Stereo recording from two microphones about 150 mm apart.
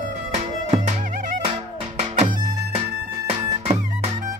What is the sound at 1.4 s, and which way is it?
Music, 40° right (ahead or behind).